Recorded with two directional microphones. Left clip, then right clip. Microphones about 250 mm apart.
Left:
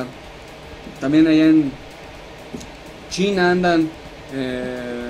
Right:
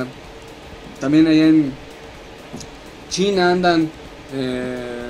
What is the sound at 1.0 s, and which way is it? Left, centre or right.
Speech, right.